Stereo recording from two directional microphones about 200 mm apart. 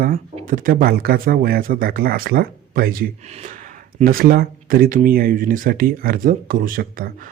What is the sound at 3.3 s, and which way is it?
Speech, 35° right (ahead or behind).